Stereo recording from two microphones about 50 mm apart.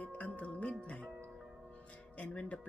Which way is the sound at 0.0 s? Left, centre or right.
Left.